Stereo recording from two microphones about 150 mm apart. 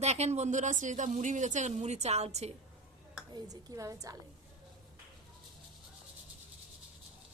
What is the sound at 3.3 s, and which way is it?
Speech, 25° right (ahead or behind).